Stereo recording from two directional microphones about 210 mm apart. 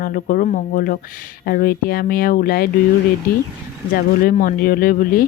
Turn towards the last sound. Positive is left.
turn(degrees=45)  # may be behind; listen again after turning